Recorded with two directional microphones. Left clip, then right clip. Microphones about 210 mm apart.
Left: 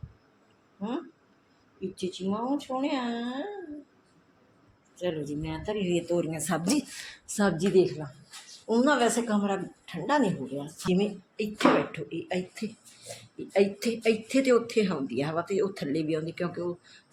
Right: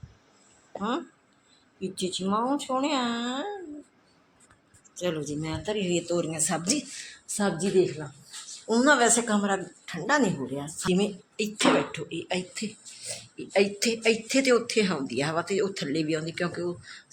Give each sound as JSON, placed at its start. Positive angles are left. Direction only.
{"t": 0.8, "sound": "speech", "side_deg": -10}
{"t": 4.9, "sound": "speech", "side_deg": -10}
{"t": 6.7, "sound": "speech", "side_deg": 25}
{"t": 8.4, "sound": "speech", "side_deg": 0}